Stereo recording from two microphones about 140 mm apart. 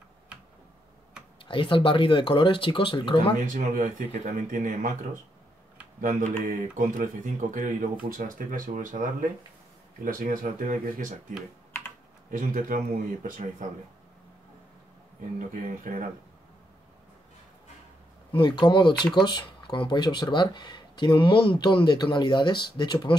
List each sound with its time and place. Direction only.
1.4 s speech: 35° left (ahead or behind)
3.4 s speech: 70° right (ahead or behind)
5.9 s speech: 85° right
7.5 s speech: 70° right (ahead or behind)
10.0 s speech: 85° right
15.3 s speech: 70° right (ahead or behind)
18.3 s speech: 35° left (ahead or behind)